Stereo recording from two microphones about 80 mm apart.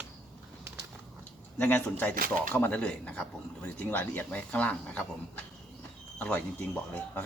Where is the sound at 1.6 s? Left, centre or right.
Left.